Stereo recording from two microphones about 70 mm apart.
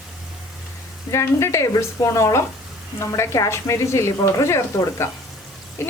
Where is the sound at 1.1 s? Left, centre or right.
Left.